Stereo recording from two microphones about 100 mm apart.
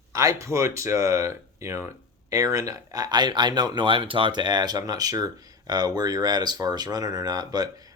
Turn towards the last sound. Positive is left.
turn(degrees=-40)  # may be behind; listen again after turning